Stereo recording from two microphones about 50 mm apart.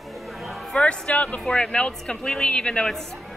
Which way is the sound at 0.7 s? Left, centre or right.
Left.